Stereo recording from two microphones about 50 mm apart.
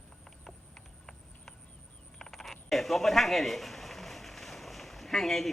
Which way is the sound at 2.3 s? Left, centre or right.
Centre.